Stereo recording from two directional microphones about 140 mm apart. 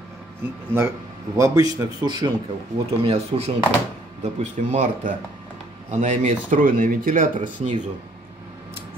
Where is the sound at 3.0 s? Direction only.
50° right (ahead or behind).